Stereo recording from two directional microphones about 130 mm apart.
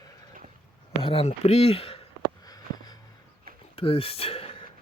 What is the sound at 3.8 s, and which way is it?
Gasp, 50° left (ahead or behind).